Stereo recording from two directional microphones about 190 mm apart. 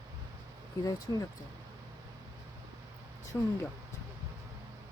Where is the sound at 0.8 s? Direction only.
15° left (ahead or behind).